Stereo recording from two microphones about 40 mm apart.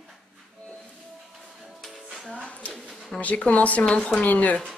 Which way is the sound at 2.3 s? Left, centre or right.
Left.